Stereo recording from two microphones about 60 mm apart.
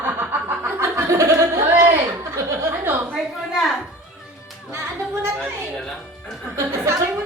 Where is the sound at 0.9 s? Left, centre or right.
Right.